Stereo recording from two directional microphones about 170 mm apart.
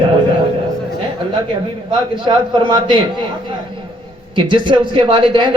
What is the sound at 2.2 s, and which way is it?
Speech, 30° right (ahead or behind).